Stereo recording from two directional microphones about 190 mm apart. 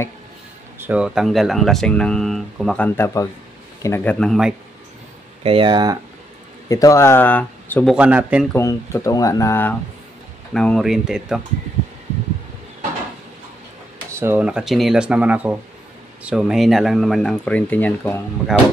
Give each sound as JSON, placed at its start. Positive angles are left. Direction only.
{"t": 0.7, "sound": "speech", "side_deg": -10}
{"t": 5.4, "sound": "speech", "side_deg": -30}
{"t": 6.7, "sound": "speech", "side_deg": 15}
{"t": 7.9, "sound": "speech", "side_deg": -5}
{"t": 8.5, "sound": "speech", "side_deg": 15}
{"t": 14.1, "sound": "speech", "side_deg": -10}